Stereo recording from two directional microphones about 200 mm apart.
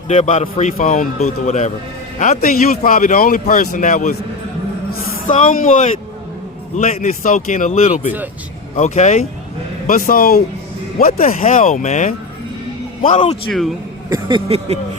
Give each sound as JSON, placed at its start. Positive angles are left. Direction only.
{"t": 0.1, "sound": "speech", "side_deg": 35}
{"t": 5.3, "sound": "speech", "side_deg": 40}
{"t": 9.8, "sound": "a man's voice", "side_deg": 45}
{"t": 13.5, "sound": "a man's voice", "side_deg": 0}
{"t": 14.1, "sound": "a sound", "side_deg": -25}